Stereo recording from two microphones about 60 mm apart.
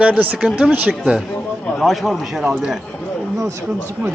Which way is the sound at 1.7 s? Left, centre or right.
Centre.